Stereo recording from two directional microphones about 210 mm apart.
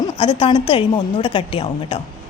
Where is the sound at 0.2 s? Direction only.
25° left (ahead or behind).